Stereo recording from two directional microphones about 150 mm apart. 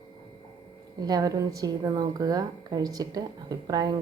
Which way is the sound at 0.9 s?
25° right (ahead or behind).